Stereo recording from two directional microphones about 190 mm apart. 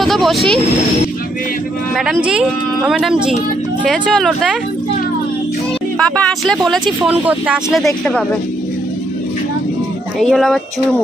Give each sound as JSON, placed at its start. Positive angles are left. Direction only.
{"t": 0.0, "sound": "speech", "side_deg": 0}
{"t": 2.2, "sound": "speech", "side_deg": -5}
{"t": 5.9, "sound": "speech", "side_deg": 5}
{"t": 10.2, "sound": "speech", "side_deg": 0}